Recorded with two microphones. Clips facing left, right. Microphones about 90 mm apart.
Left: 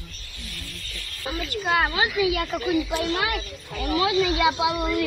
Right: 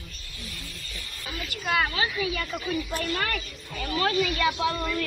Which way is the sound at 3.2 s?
10° left (ahead or behind).